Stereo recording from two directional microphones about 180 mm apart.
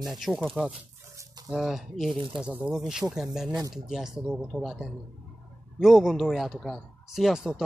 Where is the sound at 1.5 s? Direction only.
Centre (ahead or behind).